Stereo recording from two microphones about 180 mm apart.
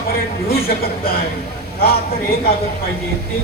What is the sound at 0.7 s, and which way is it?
Speech, 55° left (ahead or behind).